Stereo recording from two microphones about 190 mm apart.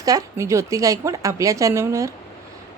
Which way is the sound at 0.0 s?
20° right (ahead or behind).